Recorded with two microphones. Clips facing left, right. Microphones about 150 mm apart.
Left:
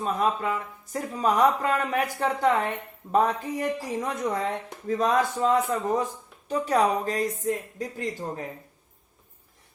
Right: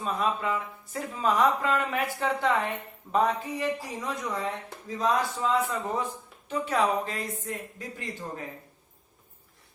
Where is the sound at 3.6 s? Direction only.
50° left (ahead or behind).